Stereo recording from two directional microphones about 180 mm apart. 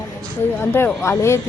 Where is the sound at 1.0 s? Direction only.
15° left (ahead or behind).